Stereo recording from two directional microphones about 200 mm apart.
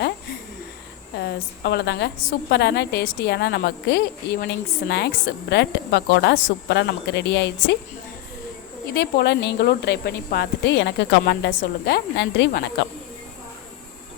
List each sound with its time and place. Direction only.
1.2 s a woman's voice: 60° left (ahead or behind)
8.9 s a woman's voice: 55° left (ahead or behind)